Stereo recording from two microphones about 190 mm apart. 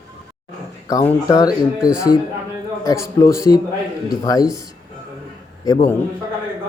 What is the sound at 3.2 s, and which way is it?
Speech, 15° left (ahead or behind).